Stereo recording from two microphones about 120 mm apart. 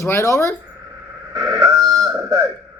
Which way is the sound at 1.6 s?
25° right (ahead or behind).